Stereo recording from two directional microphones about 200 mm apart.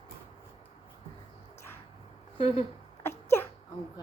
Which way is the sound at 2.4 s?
30° left (ahead or behind).